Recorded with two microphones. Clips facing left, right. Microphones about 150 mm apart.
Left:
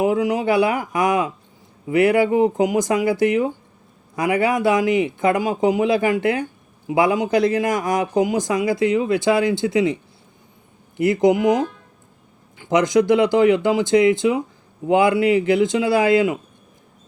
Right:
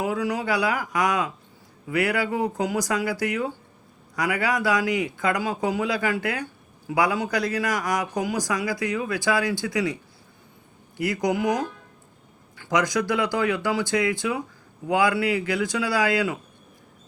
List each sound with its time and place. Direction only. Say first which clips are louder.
0.0 s speech: left 7 dB; 20° left (ahead or behind)